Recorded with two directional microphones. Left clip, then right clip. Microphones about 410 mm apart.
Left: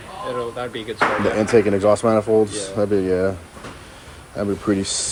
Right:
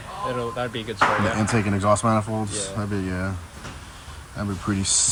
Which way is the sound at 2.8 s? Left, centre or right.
Left.